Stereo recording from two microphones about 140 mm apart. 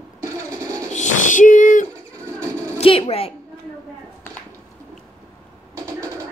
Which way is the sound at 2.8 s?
40° left (ahead or behind).